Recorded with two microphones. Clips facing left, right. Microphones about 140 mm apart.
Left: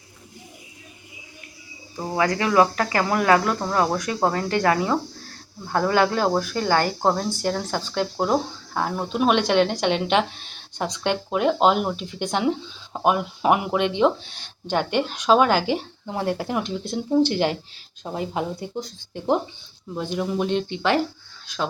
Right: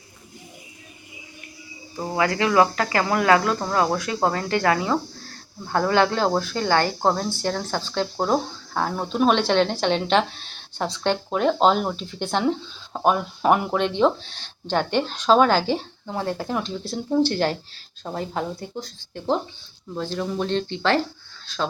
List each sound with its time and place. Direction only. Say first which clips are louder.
2.1 s speech: even; 15° left (ahead or behind)
5.9 s speech: even; 10° left (ahead or behind)